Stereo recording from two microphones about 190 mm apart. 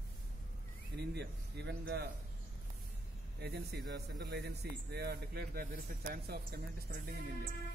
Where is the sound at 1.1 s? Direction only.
65° right (ahead or behind).